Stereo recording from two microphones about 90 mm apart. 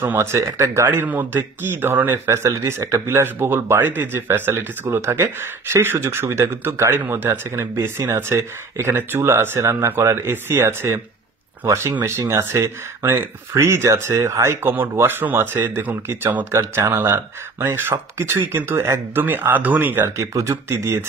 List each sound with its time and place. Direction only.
0.0 s speech: 25° right (ahead or behind)
0.8 s speech: 20° right (ahead or behind)
20.2 s speech: 35° right (ahead or behind)